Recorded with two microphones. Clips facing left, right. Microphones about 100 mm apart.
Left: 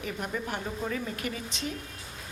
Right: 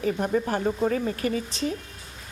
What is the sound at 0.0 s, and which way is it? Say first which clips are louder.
Speech: right 9 dB; 40° right (ahead or behind).